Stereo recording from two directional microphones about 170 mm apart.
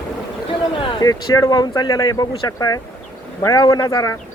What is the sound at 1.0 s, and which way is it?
Speech, 20° left (ahead or behind).